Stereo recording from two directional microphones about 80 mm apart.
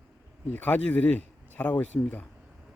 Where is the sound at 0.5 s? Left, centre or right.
Centre.